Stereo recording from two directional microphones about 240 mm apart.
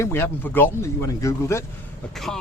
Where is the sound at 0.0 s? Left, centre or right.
Centre.